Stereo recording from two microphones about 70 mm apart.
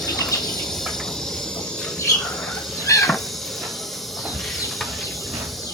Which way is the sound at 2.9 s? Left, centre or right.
Left.